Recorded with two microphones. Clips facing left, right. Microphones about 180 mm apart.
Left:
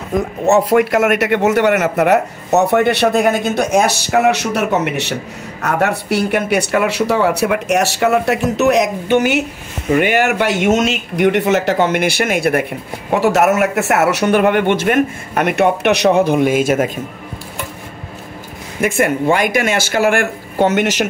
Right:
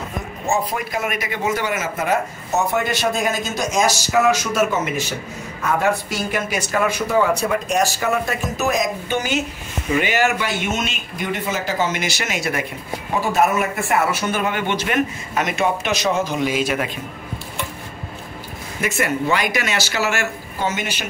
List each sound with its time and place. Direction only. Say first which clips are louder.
0.5 s speech: left 11 dB; 75° left (ahead or behind)
9.8 s a man's voice: left 5 dB; 55° left (ahead or behind)
13.1 s a man's voice: left 6 dB; 75° left (ahead or behind); by 17.0 s 45° left (ahead or behind)
18.8 s speech: left 6 dB; 50° left (ahead or behind); by 21.0 s 70° left (ahead or behind)